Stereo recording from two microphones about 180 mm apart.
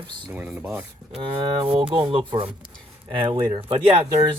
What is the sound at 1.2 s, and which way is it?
Speech, 30° right (ahead or behind).